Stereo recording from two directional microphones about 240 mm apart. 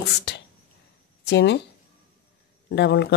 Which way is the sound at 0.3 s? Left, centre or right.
Left.